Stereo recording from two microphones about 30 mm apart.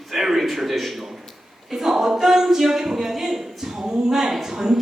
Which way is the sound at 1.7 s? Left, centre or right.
Centre.